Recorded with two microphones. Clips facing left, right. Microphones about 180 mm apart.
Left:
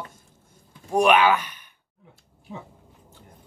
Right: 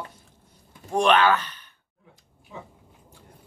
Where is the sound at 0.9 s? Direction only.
10° left (ahead or behind).